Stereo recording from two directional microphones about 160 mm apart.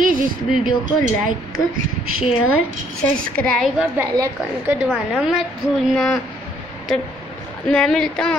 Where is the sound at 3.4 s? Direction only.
Centre (ahead or behind).